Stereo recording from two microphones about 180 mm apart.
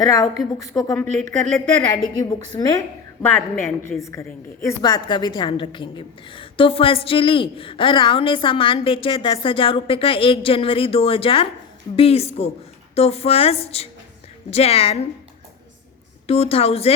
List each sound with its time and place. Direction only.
0.0 s a woman's voice: 20° left (ahead or behind)
1.3 s a woman's voice: centre (ahead or behind)
2.1 s a woman's voice: 20° left (ahead or behind)
16.2 s a woman's voice: 30° left (ahead or behind)